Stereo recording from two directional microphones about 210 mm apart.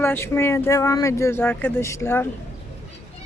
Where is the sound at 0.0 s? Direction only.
10° left (ahead or behind).